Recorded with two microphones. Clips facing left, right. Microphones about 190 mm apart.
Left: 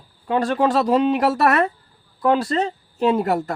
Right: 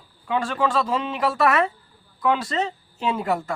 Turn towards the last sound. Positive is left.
turn(degrees=40)  # may be behind; listen again after turning